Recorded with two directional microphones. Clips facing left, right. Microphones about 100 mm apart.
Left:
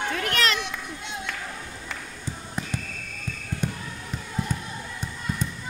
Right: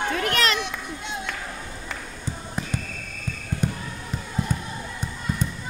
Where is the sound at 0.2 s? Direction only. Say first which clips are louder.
Right 1 dB; 20° right (ahead or behind).